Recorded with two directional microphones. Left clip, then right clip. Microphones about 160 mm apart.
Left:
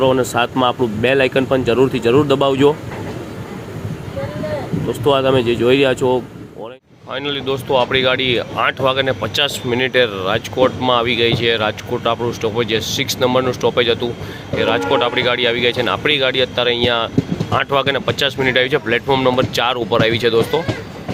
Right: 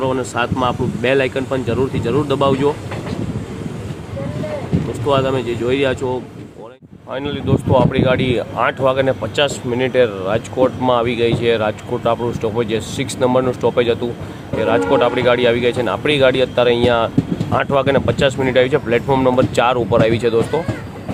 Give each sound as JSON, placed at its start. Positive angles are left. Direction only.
{"t": 0.0, "sound": "speech", "side_deg": 20}
{"t": 5.0, "sound": "speech", "side_deg": 20}
{"t": 7.1, "sound": "speech", "side_deg": -5}